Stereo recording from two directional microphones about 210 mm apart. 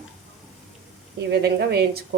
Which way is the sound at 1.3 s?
50° right (ahead or behind).